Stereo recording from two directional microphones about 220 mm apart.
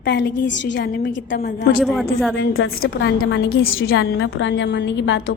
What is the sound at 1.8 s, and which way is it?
Speech, centre (ahead or behind).